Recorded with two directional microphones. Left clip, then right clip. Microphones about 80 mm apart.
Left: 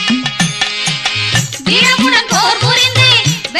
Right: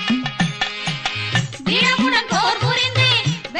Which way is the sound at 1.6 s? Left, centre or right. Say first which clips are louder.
Left 7 dB; right.